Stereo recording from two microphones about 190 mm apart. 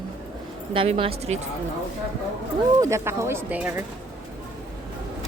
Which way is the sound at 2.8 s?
15° right (ahead or behind).